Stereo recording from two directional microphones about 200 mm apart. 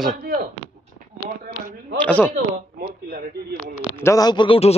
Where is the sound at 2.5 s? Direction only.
40° right (ahead or behind).